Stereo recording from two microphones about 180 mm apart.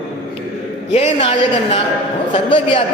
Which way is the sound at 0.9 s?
35° left (ahead or behind).